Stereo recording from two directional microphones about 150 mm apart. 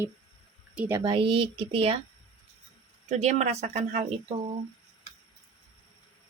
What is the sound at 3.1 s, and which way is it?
Speech, 50° right (ahead or behind).